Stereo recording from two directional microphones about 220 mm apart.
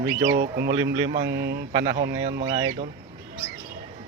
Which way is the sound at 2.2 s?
30° right (ahead or behind).